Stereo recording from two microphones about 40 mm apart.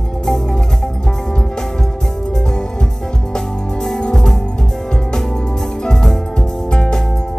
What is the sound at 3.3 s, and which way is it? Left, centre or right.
Music, centre.